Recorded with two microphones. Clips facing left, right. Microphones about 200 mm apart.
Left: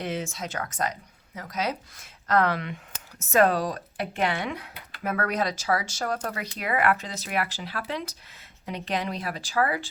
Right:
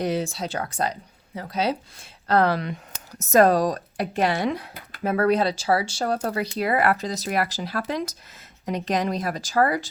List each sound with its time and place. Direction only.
0.0 s a woman's voice: 35° right (ahead or behind)